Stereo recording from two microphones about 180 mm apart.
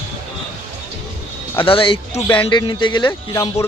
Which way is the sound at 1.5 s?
30° left (ahead or behind).